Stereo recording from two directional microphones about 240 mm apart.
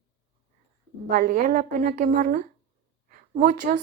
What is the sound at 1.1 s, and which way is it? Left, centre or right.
Speech, right.